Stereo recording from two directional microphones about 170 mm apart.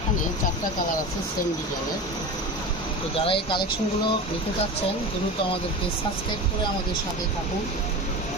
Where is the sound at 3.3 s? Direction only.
30° left (ahead or behind).